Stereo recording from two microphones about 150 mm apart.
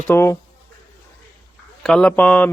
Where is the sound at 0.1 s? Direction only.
15° left (ahead or behind).